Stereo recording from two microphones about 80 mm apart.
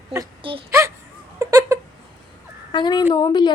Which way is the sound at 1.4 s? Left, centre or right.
Right.